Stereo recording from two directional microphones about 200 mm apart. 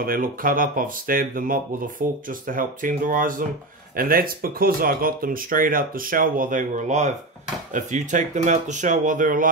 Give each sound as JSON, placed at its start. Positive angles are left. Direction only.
{"t": 0.0, "sound": "speech", "side_deg": -45}